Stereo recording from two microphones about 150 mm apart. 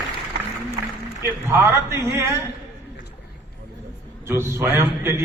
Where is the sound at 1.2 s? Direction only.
15° right (ahead or behind).